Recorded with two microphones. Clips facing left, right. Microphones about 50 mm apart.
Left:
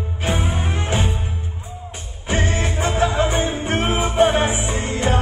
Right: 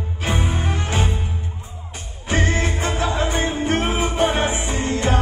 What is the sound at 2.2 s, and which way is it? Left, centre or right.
Music, left.